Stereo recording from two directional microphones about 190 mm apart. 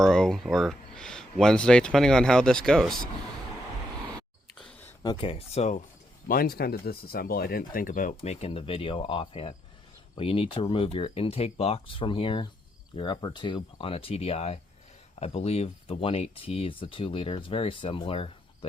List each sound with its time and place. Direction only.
0.0 s speech: 5° left (ahead or behind)
4.5 s a sound: 5° left (ahead or behind)
5.0 s speech: 25° left (ahead or behind)
6.2 s speech: 50° left (ahead or behind)
8.1 s speech: 35° left (ahead or behind)